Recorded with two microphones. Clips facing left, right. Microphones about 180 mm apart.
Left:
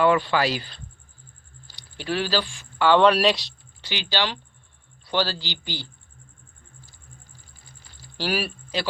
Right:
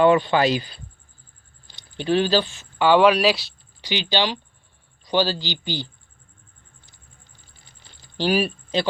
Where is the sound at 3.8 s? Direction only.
15° right (ahead or behind).